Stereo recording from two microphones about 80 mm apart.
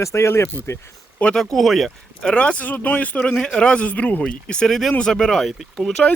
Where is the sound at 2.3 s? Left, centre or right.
Centre.